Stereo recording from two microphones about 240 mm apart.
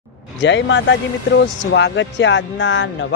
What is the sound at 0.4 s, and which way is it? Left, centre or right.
Speech, left.